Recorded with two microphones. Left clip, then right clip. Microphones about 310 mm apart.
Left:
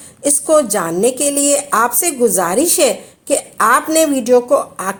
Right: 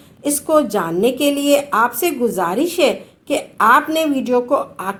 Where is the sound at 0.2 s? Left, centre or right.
Left.